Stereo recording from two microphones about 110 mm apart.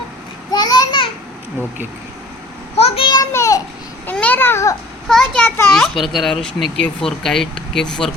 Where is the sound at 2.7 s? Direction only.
65° left (ahead or behind).